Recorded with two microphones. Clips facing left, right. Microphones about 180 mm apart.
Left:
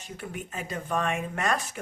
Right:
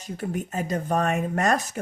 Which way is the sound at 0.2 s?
40° right (ahead or behind).